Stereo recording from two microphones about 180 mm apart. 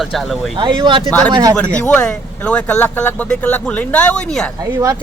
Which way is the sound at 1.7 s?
5° left (ahead or behind).